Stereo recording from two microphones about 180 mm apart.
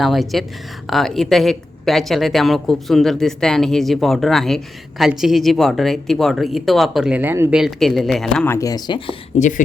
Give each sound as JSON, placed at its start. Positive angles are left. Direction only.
{"t": 0.0, "sound": "a woman's voice", "side_deg": 0}
{"t": 7.6, "sound": "a woman's voice", "side_deg": 0}
{"t": 8.5, "sound": "speech", "side_deg": 20}
{"t": 9.4, "sound": "speech", "side_deg": 45}